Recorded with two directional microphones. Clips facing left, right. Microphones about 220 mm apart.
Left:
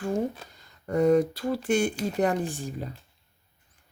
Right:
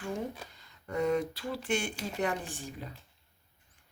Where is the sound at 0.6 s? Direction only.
40° left (ahead or behind).